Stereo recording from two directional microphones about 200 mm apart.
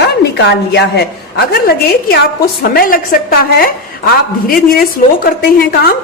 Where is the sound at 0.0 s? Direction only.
60° left (ahead or behind).